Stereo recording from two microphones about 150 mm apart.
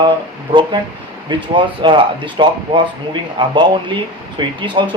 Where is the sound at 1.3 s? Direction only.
30° right (ahead or behind).